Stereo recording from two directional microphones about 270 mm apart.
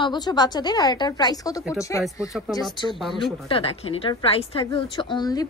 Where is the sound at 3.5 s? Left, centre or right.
Left.